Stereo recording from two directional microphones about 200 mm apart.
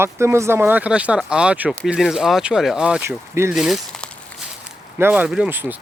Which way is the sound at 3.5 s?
Centre (ahead or behind).